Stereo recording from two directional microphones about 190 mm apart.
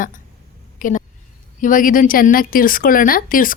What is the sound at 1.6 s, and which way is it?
Speech, 45° left (ahead or behind).